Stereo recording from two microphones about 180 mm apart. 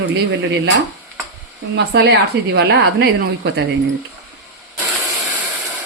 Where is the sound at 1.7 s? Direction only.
75° right (ahead or behind).